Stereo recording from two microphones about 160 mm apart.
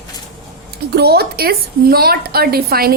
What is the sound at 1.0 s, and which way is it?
A woman's voice, 80° right.